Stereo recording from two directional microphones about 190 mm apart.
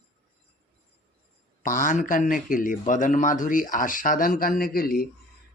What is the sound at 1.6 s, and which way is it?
A man's voice, 45° left (ahead or behind).